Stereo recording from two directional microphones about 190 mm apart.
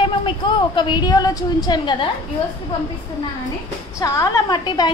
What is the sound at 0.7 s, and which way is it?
A woman's voice, 25° left (ahead or behind).